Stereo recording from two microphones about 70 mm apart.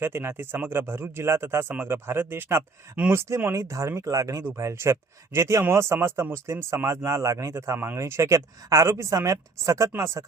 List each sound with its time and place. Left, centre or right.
0.0 s speech: right